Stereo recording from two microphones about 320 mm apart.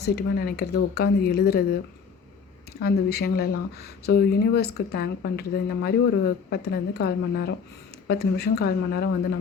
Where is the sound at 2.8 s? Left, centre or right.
Left.